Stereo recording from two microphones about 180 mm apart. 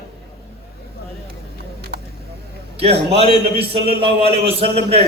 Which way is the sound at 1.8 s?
65° right (ahead or behind).